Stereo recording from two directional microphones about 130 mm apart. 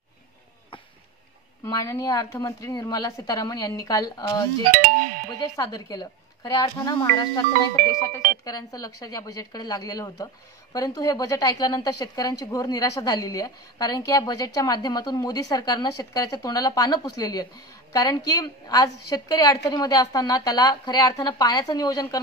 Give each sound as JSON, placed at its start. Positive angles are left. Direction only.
{"t": 1.6, "sound": "speech", "side_deg": 25}
{"t": 4.8, "sound": "music", "side_deg": -90}
{"t": 5.4, "sound": "speech", "side_deg": 30}
{"t": 8.5, "sound": "speech", "side_deg": 30}